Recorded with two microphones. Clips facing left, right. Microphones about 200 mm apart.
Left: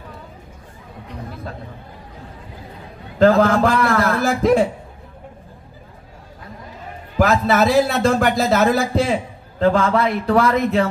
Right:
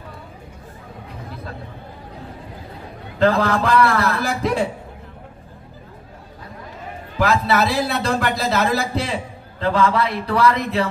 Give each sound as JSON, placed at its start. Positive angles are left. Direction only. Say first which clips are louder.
{"t": 3.2, "sound": "a man's voice", "louder": "left 4 dB", "side_deg": 45}
{"t": 7.2, "sound": "a man's voice", "louder": "left 2 dB", "side_deg": 45}